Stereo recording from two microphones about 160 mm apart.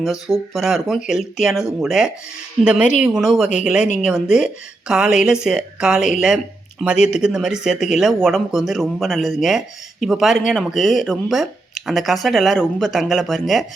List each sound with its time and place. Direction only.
0.0 s speech: centre (ahead or behind)